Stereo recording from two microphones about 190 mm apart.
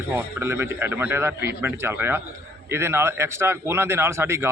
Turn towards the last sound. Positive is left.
turn(degrees=-15)  # may be behind; listen again after turning